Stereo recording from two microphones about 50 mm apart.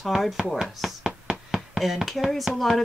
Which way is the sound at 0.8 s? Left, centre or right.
Centre.